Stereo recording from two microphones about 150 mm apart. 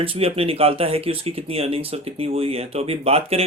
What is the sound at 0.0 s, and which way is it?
Speech, 40° right (ahead or behind).